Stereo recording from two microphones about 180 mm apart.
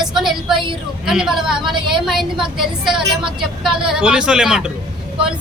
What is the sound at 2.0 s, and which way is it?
Speech, centre (ahead or behind).